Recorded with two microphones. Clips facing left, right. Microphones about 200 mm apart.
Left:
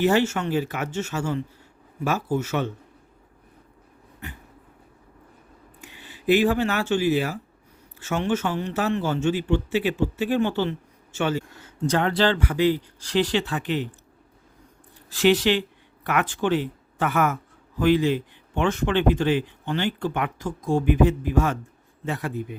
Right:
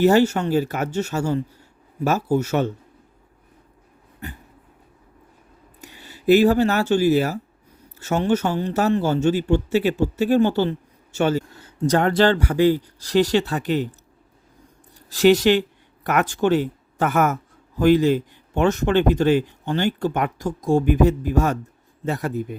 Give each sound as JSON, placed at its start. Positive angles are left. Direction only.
{"t": 0.0, "sound": "a man's voice", "side_deg": -40}
{"t": 5.8, "sound": "a man's voice", "side_deg": -40}
{"t": 15.1, "sound": "a man's voice", "side_deg": -40}